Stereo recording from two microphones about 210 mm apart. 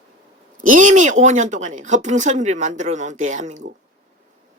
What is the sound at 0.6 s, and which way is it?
A woman's voice, 40° right (ahead or behind).